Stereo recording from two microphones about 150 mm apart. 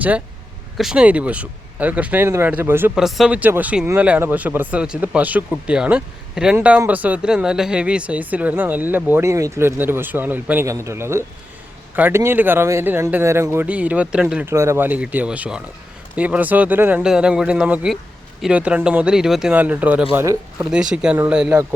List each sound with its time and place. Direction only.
0.8 s speech: 5° right (ahead or behind)
2.9 s speech: centre (ahead or behind)
20.7 s speech: 5° right (ahead or behind)